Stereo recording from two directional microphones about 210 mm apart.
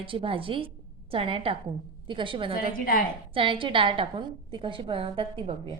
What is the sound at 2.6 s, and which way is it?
Speech, 45° left (ahead or behind).